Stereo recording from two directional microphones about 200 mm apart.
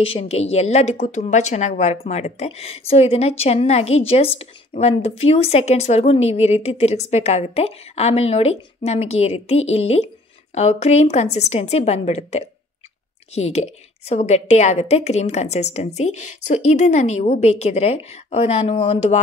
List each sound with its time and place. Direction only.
0.0 s a woman's voice: 30° left (ahead or behind)